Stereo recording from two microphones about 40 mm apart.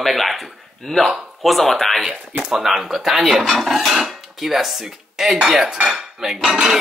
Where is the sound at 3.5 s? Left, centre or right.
Centre.